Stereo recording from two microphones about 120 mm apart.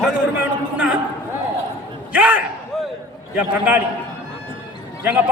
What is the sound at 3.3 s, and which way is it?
Speech, 10° right (ahead or behind).